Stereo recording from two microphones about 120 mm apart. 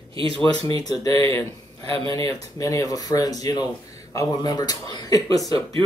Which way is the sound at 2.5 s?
30° left (ahead or behind).